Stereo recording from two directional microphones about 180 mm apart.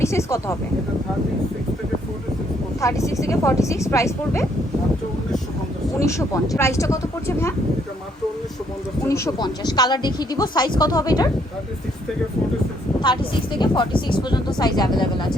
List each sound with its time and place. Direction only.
0.0 s a woman's voice: 15° left (ahead or behind)
2.8 s a woman's voice: 15° left (ahead or behind)
6.1 s a woman's voice: 15° left (ahead or behind)
9.0 s speech: 15° left (ahead or behind)
13.0 s speech: 25° left (ahead or behind)